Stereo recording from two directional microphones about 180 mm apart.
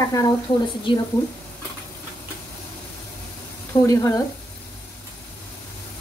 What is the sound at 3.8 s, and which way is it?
Speech, 15° left (ahead or behind).